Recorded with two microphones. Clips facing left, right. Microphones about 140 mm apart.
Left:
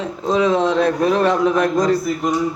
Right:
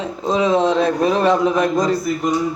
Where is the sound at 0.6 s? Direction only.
25° right (ahead or behind); by 1.9 s 5° right (ahead or behind).